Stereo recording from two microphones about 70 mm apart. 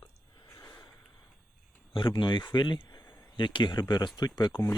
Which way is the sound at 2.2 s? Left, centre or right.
Left.